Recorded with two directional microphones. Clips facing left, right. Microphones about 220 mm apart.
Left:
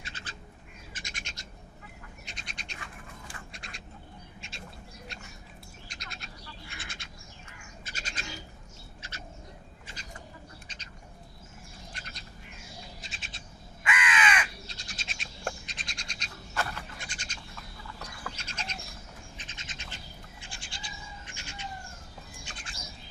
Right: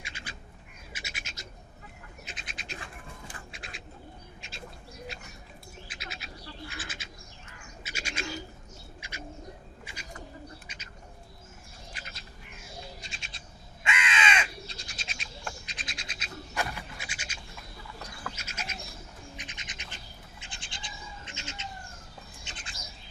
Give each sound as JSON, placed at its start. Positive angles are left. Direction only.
{"t": 0.0, "sound": "bird", "side_deg": -10}
{"t": 2.7, "sound": "a sound", "side_deg": -30}
{"t": 3.5, "sound": "bird", "side_deg": 0}
{"t": 11.9, "sound": "bird", "side_deg": -5}
{"t": 13.8, "sound": "crow", "side_deg": -25}
{"t": 14.7, "sound": "bird", "side_deg": 0}
{"t": 20.4, "sound": "goat", "side_deg": -20}
{"t": 22.5, "sound": "bird", "side_deg": -20}